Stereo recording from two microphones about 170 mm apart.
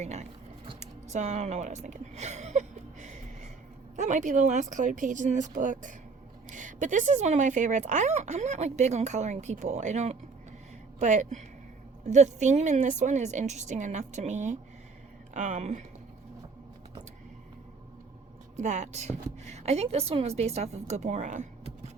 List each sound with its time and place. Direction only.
0.0 s a woman's voice: 40° right (ahead or behind)
0.8 s a sound: 45° right (ahead or behind)
3.9 s speech: 45° right (ahead or behind)
18.5 s a woman's voice: 45° right (ahead or behind)